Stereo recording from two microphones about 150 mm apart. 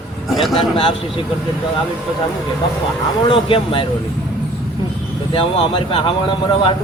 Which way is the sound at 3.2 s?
35° left (ahead or behind).